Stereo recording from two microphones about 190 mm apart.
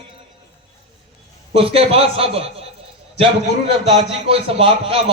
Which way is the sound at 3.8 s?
30° right (ahead or behind).